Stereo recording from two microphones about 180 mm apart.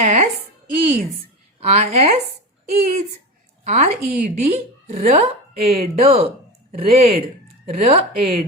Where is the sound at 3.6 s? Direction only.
40° right (ahead or behind).